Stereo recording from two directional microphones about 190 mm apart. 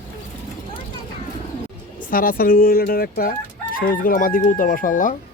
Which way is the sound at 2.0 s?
50° left (ahead or behind).